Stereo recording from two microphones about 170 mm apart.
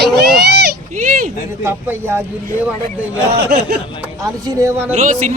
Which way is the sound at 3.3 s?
70° right (ahead or behind).